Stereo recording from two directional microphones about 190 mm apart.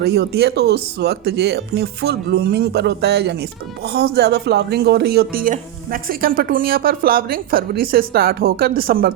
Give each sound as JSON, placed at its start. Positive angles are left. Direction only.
{"t": 0.0, "sound": "speech", "side_deg": -60}